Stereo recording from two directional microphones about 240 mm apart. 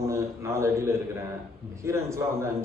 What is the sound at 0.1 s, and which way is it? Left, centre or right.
A man's voice, centre.